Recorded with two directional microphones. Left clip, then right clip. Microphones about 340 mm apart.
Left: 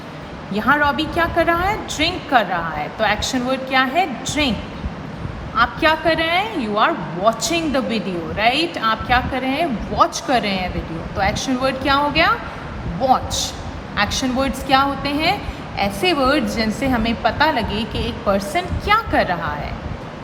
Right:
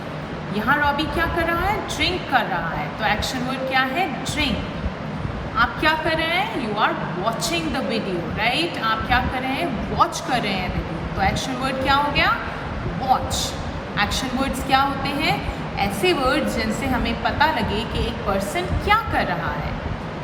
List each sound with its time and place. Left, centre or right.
0.5 s speech: centre
5.5 s speech: centre